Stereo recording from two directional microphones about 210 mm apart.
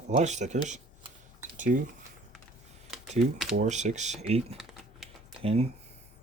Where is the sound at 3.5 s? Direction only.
35° right (ahead or behind).